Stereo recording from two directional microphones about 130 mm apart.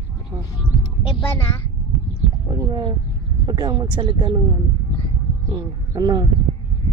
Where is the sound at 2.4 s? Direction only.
25° right (ahead or behind).